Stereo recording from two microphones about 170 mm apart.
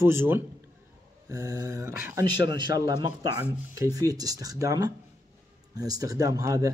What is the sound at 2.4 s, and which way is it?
Speech, 25° right (ahead or behind).